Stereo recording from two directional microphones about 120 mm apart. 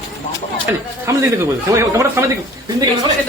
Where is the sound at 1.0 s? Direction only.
25° right (ahead or behind).